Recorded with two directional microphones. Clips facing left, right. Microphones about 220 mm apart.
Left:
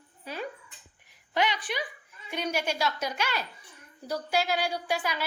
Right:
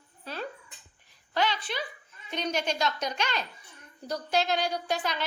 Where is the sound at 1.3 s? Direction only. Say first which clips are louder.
Left 1 dB; 15° left (ahead or behind).